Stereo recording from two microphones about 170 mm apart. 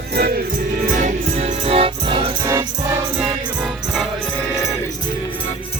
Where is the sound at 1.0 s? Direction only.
40° right (ahead or behind).